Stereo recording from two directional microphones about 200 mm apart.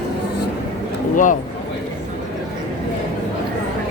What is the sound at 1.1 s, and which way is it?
Speech, 40° left (ahead or behind).